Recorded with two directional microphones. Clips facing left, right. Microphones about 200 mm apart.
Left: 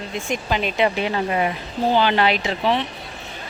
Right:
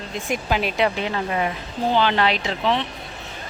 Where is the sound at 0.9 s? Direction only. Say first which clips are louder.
Left 2 dB; 10° left (ahead or behind).